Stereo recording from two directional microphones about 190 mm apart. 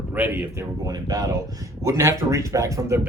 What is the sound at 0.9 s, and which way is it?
Speech, 20° right (ahead or behind).